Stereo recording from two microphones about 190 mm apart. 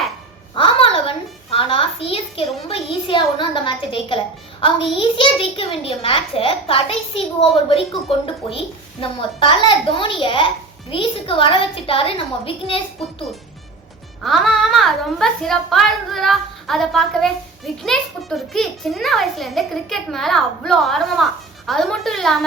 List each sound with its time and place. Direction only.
0.5 s a sound: 30° left (ahead or behind)
2.6 s a woman's voice: 25° left (ahead or behind)
14.3 s a child's voice: centre (ahead or behind)